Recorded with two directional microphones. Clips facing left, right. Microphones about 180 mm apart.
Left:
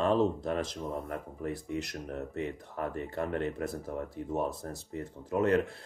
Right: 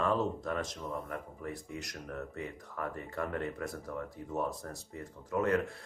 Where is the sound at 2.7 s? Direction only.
30° left (ahead or behind).